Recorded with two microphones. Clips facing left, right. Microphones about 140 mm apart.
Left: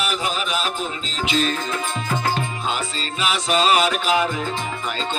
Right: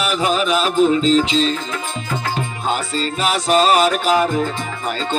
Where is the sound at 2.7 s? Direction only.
45° right (ahead or behind).